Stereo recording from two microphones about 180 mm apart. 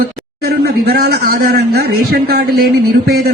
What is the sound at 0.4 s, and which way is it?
A man's voice, 60° right (ahead or behind).